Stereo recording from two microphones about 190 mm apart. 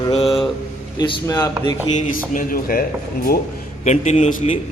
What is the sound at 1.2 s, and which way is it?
Speech, 15° left (ahead or behind).